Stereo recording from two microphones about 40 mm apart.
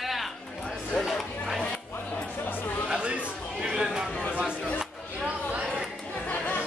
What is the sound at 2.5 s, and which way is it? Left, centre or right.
Speech, left.